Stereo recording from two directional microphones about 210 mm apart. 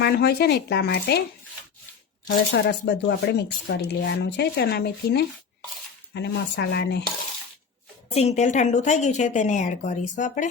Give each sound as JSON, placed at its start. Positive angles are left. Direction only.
{"t": 0.0, "sound": "speech", "side_deg": 50}
{"t": 2.2, "sound": "speech", "side_deg": 55}
{"t": 8.1, "sound": "a woman's voice", "side_deg": 30}